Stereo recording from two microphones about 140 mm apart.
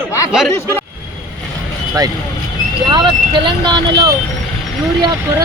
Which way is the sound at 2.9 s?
35° right (ahead or behind).